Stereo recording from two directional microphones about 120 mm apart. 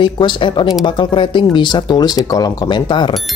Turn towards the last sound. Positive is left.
turn(degrees=40)  # may be behind; listen again after turning